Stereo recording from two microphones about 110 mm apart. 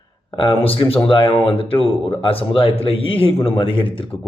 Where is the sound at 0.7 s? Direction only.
55° left (ahead or behind).